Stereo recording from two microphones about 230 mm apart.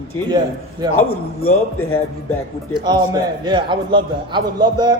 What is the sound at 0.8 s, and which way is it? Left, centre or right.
Speech, centre.